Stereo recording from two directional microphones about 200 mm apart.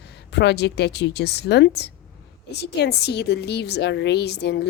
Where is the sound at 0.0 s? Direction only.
55° left (ahead or behind).